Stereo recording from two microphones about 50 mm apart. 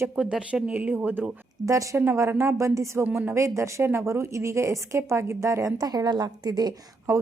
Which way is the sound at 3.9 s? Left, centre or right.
Right.